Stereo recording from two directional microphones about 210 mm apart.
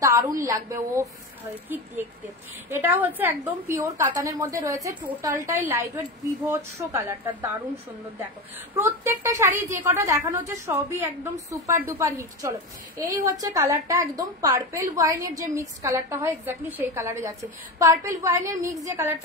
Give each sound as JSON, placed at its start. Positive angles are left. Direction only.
{"t": 0.0, "sound": "a sound", "side_deg": -15}
{"t": 0.5, "sound": "a woman's voice", "side_deg": -15}
{"t": 2.7, "sound": "a woman's voice", "side_deg": -10}
{"t": 8.7, "sound": "a woman's voice", "side_deg": -10}